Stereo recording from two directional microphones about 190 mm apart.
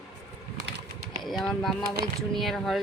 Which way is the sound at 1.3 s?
Centre (ahead or behind).